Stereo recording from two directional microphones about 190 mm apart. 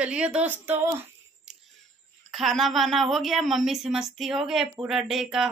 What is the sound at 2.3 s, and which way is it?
A woman's voice, centre (ahead or behind).